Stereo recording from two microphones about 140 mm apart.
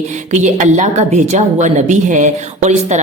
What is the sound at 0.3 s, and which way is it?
A woman's voice, 55° right (ahead or behind).